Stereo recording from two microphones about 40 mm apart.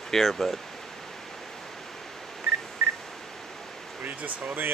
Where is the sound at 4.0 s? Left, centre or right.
Right.